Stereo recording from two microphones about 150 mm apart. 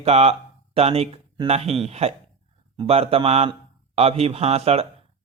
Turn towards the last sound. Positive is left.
turn(degrees=-45)  # may be behind; listen again after turning